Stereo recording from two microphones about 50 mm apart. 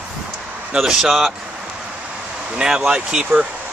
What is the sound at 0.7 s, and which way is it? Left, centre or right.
Speech, centre.